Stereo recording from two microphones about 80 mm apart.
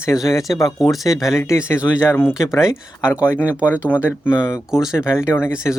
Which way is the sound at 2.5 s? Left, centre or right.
Left.